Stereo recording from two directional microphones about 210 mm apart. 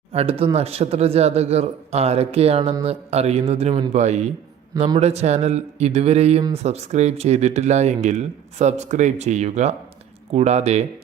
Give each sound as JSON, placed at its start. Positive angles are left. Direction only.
{"t": 0.1, "sound": "speech", "side_deg": -30}